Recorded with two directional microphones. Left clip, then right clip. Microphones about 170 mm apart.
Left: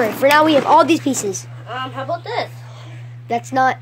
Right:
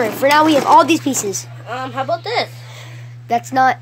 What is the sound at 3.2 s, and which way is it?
Speech, 5° right (ahead or behind).